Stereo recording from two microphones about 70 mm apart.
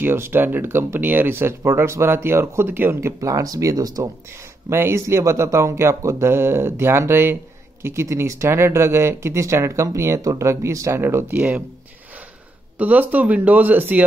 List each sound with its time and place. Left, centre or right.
0.0 s speech: right
4.3 s speech: right
12.7 s speech: right